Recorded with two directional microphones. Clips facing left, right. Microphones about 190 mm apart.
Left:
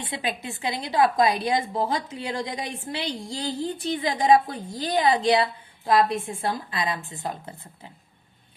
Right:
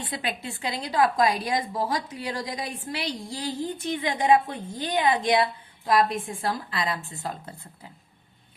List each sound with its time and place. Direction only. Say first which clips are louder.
0.0 s a woman's voice: left 1 dB; 20° left (ahead or behind)